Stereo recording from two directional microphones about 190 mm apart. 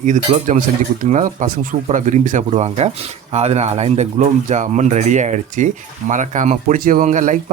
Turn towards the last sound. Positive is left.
turn(degrees=-40)  # may be behind; listen again after turning